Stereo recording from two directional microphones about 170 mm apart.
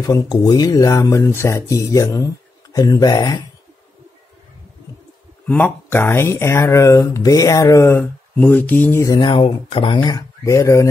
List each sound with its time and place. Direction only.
0.0 s speech: 20° left (ahead or behind)
5.5 s speech: 10° left (ahead or behind)